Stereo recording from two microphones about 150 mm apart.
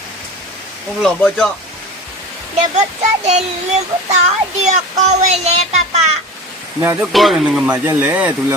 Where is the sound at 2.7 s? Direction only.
50° right (ahead or behind).